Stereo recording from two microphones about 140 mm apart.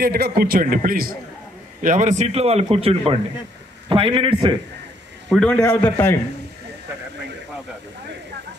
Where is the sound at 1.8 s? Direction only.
65° right (ahead or behind); by 4.6 s 35° right (ahead or behind).